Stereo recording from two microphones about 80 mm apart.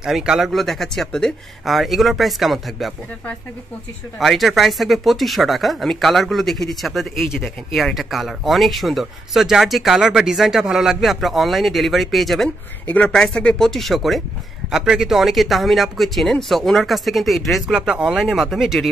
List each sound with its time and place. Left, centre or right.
0.0 s speech: centre
4.2 s speech: centre
12.8 s speech: centre
13.1 s speech: centre
17.7 s speech: centre